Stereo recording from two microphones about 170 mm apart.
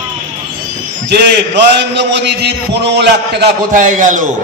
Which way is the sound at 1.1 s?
75° right (ahead or behind).